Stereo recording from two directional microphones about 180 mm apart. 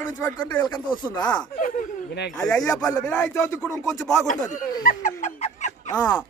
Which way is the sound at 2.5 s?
5° left (ahead or behind).